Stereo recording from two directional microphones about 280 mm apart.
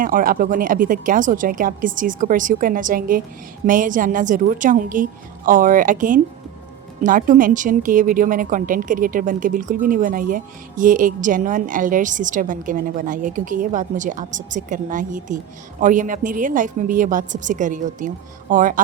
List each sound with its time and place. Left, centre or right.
0.0 s a woman's voice: right